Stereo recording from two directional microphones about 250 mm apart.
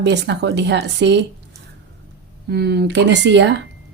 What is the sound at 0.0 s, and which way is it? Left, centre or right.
Speech, right.